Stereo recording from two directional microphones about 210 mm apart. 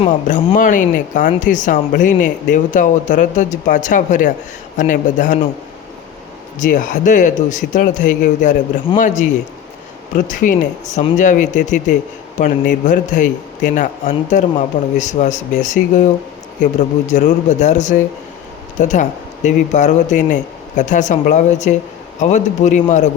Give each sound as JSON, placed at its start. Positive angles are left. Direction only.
{"t": 0.0, "sound": "speech", "side_deg": 30}
{"t": 6.6, "sound": "speech", "side_deg": 40}
{"t": 17.1, "sound": "speech", "side_deg": 35}